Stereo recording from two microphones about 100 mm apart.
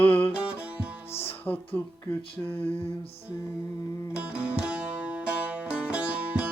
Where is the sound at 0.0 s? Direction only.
20° left (ahead or behind).